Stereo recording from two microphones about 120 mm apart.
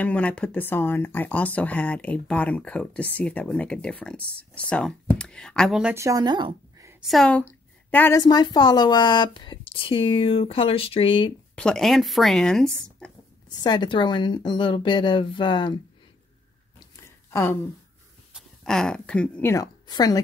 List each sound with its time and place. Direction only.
0.0 s speech: 10° left (ahead or behind)
5.9 s speech: 30° right (ahead or behind)
7.0 s a woman's voice: centre (ahead or behind)
8.2 s speech: 35° left (ahead or behind)
11.5 s speech: 5° left (ahead or behind)
13.5 s speech: 35° left (ahead or behind)
17.3 s a woman's voice: 25° left (ahead or behind)
18.7 s speech: 5° left (ahead or behind)
19.5 s a woman's voice: 30° left (ahead or behind)